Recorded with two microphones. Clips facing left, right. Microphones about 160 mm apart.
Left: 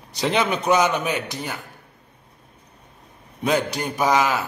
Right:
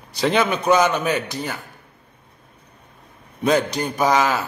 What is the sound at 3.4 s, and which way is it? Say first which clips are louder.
A man's voice: right 3 dB; 10° left (ahead or behind).